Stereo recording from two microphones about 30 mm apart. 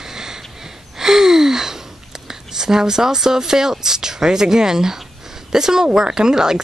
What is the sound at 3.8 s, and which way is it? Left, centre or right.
Speech, centre.